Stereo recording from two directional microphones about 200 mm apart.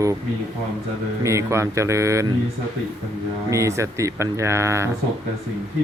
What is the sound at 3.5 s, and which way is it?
Speech, 15° right (ahead or behind).